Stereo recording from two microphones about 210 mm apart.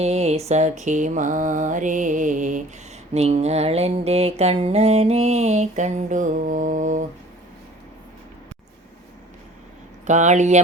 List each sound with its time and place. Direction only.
0.0 s music: 30° right (ahead or behind)
10.1 s music: 35° right (ahead or behind)